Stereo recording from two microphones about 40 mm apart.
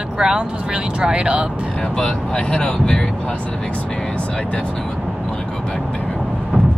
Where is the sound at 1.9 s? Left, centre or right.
Left.